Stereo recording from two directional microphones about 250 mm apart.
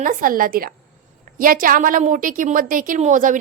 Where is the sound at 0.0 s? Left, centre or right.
Right.